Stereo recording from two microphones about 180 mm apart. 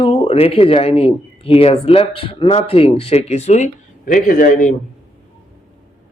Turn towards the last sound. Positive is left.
turn(degrees=50)  # may be behind; listen again after turning